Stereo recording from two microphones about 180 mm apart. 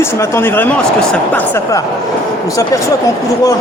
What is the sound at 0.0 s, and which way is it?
Speech, 15° left (ahead or behind).